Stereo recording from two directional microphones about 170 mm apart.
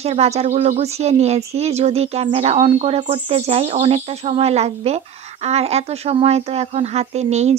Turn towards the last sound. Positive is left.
turn(degrees=-40)  # may be behind; listen again after turning